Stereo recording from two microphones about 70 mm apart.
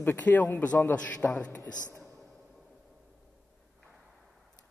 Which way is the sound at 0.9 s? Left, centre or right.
Left.